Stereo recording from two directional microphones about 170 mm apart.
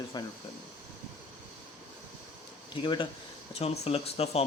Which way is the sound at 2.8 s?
25° left (ahead or behind).